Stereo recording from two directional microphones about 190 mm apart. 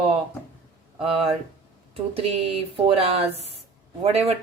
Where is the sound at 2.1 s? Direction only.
30° right (ahead or behind).